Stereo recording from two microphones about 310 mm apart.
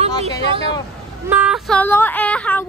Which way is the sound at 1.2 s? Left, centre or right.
Centre.